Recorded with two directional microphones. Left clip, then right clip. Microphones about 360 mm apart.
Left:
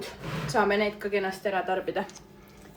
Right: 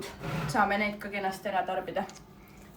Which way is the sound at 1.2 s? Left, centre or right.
Left.